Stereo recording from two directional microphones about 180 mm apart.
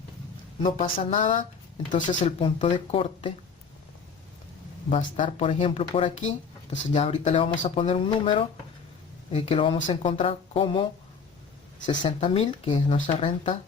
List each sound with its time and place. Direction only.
0.9 s speech: 40° left (ahead or behind)
2.4 s speech: 30° left (ahead or behind)
4.9 s speech: 40° left (ahead or behind)
11.9 s speech: 30° left (ahead or behind)